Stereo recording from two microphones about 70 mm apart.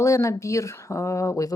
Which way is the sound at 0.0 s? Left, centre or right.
Left.